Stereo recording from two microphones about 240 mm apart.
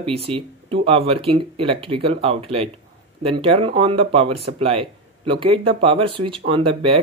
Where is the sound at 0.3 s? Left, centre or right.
Right.